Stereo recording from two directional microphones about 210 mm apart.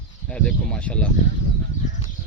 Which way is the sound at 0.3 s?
5° left (ahead or behind).